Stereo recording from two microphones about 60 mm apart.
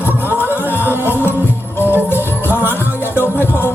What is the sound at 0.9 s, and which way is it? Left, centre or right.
Music, right.